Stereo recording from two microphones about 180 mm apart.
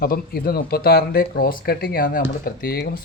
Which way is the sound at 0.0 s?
55° left (ahead or behind).